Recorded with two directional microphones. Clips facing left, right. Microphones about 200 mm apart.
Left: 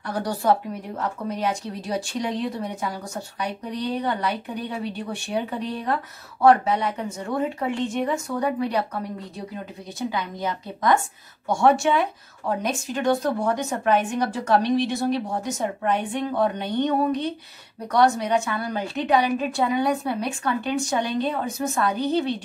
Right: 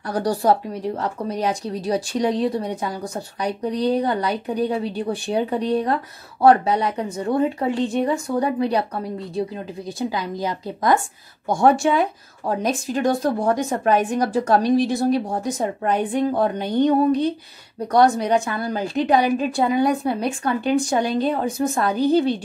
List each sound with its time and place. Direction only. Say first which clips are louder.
0.1 s speech: right 3 dB; 35° right (ahead or behind)
9.9 s speech: right 2 dB; 35° right (ahead or behind)